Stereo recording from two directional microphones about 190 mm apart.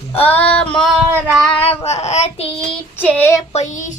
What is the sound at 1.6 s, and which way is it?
Child singing, 35° left (ahead or behind).